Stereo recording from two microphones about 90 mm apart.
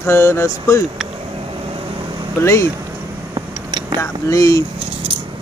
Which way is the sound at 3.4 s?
70° right (ahead or behind).